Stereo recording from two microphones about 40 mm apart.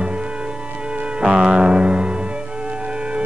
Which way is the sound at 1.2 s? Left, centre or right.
Right.